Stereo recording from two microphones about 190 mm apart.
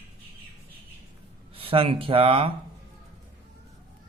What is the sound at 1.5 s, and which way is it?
Speech, 30° right (ahead or behind).